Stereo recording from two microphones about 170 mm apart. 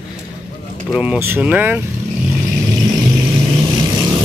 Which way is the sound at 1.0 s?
10° right (ahead or behind).